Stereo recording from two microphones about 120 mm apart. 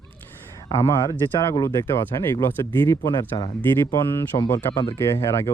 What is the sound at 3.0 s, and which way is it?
Speech, 35° left (ahead or behind).